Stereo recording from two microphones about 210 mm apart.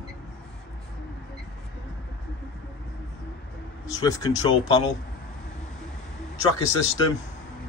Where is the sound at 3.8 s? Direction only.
15° left (ahead or behind).